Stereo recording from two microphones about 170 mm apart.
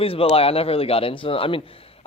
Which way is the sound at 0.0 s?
35° left (ahead or behind).